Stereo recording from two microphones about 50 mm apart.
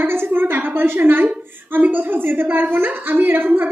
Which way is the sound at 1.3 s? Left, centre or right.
Right.